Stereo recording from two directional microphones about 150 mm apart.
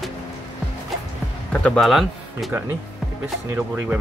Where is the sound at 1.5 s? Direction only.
5° left (ahead or behind).